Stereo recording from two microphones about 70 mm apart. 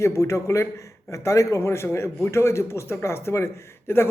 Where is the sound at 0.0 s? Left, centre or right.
Left.